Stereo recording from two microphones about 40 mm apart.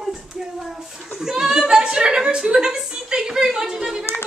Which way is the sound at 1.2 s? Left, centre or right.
Centre.